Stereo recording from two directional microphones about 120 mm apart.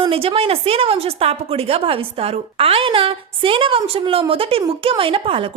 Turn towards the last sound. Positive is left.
turn(degrees=-50)  # may be behind; listen again after turning